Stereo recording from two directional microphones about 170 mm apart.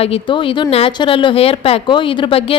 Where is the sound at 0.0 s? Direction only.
30° left (ahead or behind).